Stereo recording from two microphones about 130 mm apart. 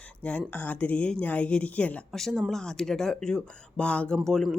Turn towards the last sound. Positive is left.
turn(degrees=5)  # may be behind; listen again after turning